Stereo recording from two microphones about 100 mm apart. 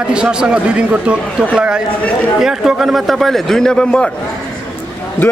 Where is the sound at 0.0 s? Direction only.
10° right (ahead or behind); by 4.1 s 10° left (ahead or behind).